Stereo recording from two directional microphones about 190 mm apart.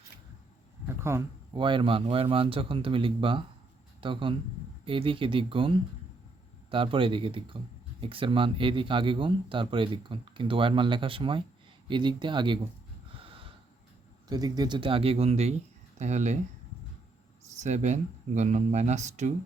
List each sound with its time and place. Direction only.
1.1 s speech: 15° right (ahead or behind)
1.5 s speech: 25° right (ahead or behind)
13.1 s snort: 30° right (ahead or behind)
14.3 s speech: 20° right (ahead or behind); by 16.4 s 40° right (ahead or behind)
17.5 s speech: 40° right (ahead or behind)